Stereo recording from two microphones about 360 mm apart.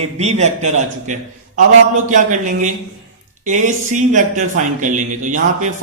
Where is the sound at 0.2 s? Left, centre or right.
Centre.